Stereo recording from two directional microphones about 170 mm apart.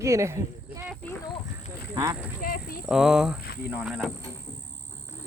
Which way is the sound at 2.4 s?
60° left (ahead or behind).